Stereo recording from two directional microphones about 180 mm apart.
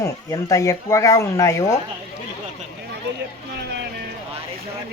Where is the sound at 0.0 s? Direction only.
20° left (ahead or behind).